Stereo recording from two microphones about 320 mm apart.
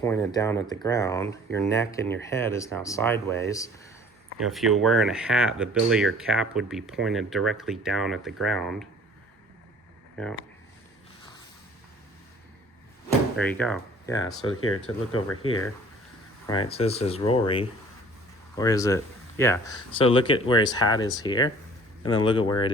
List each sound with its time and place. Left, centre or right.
0.0 s speech: centre
13.3 s speech: centre
14.4 s speech: left
16.5 s speech: centre